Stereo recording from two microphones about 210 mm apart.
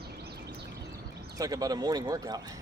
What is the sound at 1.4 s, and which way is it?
Speech, 15° right (ahead or behind).